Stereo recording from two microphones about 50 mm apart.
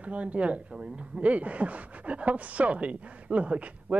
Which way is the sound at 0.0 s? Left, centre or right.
Right.